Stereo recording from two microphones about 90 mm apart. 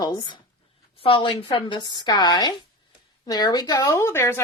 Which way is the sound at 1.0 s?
80° left.